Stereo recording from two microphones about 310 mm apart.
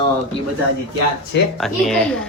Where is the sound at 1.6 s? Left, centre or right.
Centre.